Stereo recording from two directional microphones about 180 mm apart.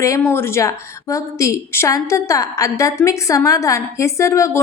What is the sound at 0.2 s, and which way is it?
A woman's voice, 10° left (ahead or behind).